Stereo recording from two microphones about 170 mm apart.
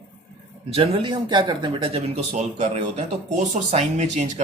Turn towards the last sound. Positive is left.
turn(degrees=-40)  # may be behind; listen again after turning